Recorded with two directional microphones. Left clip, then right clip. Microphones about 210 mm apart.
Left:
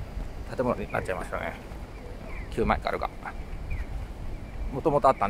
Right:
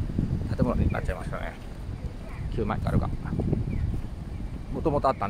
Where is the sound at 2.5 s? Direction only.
10° left (ahead or behind).